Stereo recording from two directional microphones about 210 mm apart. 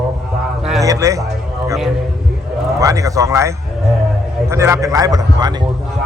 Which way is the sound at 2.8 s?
15° right (ahead or behind).